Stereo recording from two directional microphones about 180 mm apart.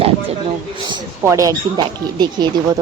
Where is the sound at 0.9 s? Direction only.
20° right (ahead or behind).